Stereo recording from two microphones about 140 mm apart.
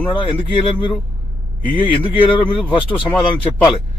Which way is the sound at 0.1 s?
35° left (ahead or behind).